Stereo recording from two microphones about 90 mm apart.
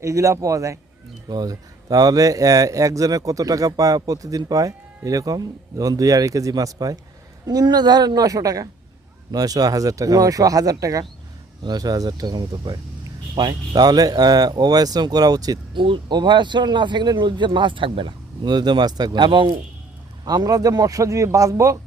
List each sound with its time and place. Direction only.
0.0 s speech: 35° right (ahead or behind)
11.6 s speech: 50° right (ahead or behind)
15.7 s speech: 65° right (ahead or behind)
20.2 s speech: 45° right (ahead or behind)